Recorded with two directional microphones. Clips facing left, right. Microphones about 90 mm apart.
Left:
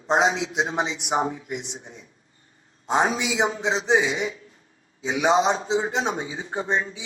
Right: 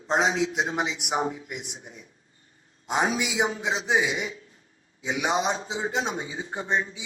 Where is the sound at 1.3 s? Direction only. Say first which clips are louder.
Left 5 dB; 25° left (ahead or behind).